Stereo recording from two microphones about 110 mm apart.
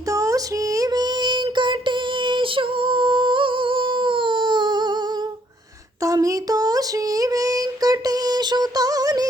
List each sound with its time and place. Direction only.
0.1 s female singing: 30° right (ahead or behind)
6.0 s female singing: 30° right (ahead or behind)